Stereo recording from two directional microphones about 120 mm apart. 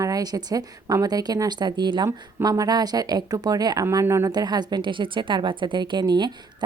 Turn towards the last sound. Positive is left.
turn(degrees=-35)  # may be behind; listen again after turning